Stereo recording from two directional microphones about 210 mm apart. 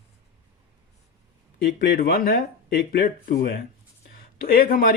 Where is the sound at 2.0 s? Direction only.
45° left (ahead or behind).